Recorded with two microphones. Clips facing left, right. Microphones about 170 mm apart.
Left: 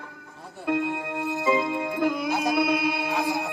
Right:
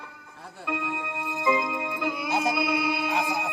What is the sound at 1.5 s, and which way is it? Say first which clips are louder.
Music: left 1 dB; 35° left (ahead or behind).